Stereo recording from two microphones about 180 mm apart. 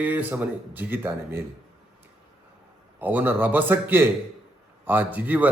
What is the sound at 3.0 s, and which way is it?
Speech, 10° right (ahead or behind).